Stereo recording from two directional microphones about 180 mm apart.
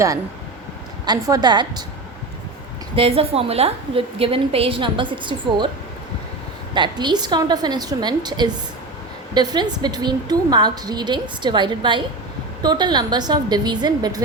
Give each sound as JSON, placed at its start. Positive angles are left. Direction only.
{"t": 1.0, "sound": "a woman's voice", "side_deg": -25}
{"t": 2.9, "sound": "a woman's voice", "side_deg": -30}
{"t": 6.7, "sound": "a woman's voice", "side_deg": -25}